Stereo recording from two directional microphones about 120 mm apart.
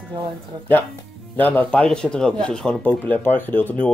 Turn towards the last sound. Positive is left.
turn(degrees=15)  # may be behind; listen again after turning